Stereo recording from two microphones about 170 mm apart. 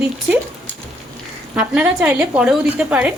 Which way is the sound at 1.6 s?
5° right (ahead or behind).